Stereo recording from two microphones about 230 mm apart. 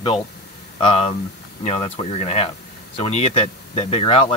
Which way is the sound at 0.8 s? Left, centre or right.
Left.